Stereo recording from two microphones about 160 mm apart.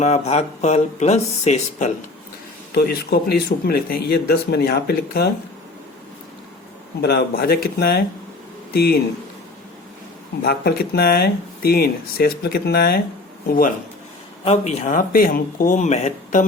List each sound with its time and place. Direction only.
0.0 s speech: 45° left (ahead or behind)
2.7 s speech: 75° left (ahead or behind)
7.0 s speech: 75° left (ahead or behind)
10.4 s speech: 75° left (ahead or behind)
13.5 s speech: 60° left (ahead or behind)
14.4 s speech: 45° left (ahead or behind)